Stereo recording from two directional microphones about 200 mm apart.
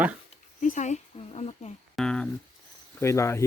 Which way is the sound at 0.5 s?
40° left (ahead or behind).